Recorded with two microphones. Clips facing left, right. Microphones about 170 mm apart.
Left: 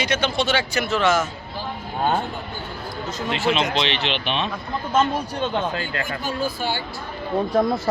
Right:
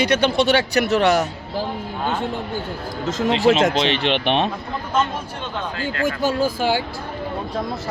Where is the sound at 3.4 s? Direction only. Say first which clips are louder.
Right 5 dB; 40° right (ahead or behind); by 4.5 s 55° right (ahead or behind).